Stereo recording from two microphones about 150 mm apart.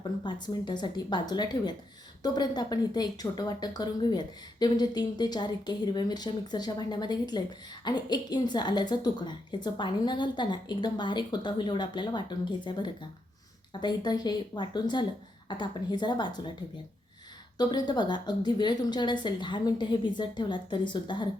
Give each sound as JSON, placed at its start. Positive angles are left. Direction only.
{"t": 0.2, "sound": "speech", "side_deg": 30}
{"t": 17.6, "sound": "speech", "side_deg": 30}